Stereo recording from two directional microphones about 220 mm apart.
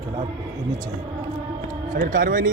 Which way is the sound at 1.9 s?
35° right (ahead or behind).